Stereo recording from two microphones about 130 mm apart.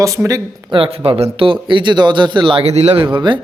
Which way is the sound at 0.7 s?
45° right (ahead or behind).